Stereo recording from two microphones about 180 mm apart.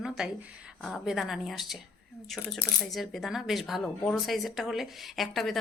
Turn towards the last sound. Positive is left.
turn(degrees=0)  # may be behind; listen again after turning